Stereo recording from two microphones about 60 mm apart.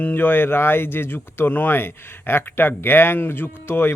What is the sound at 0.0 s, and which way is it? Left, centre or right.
Speech, left.